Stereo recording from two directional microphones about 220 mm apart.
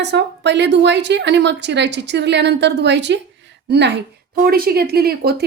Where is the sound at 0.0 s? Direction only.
50° right (ahead or behind).